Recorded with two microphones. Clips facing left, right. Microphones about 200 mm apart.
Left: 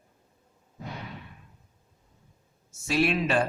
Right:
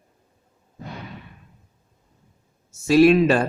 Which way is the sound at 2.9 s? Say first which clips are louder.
Right 11 dB; 40° right (ahead or behind).